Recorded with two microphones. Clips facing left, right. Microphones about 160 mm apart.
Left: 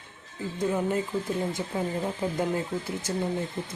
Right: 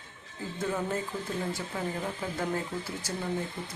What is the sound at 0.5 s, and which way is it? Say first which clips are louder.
Speech: left 5 dB; 20° left (ahead or behind).